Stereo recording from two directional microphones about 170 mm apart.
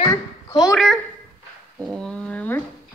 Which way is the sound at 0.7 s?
Centre (ahead or behind).